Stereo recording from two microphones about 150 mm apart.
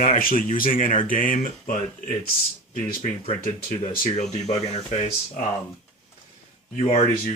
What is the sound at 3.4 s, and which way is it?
Speech, 70° left (ahead or behind).